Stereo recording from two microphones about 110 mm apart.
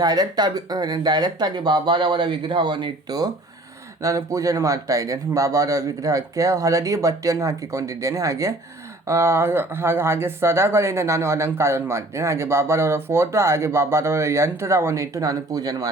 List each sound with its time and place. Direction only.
0.0 s speech: 35° right (ahead or behind)
4.0 s speech: 30° right (ahead or behind)